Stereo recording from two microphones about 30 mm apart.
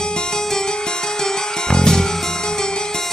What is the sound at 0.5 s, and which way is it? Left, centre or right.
Music, left.